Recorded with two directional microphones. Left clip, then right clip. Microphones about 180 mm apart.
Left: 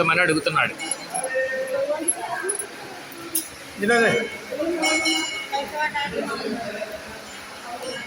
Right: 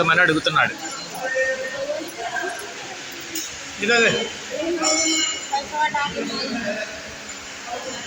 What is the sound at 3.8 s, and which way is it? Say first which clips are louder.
Speech: right 1 dB; 35° left (ahead or behind).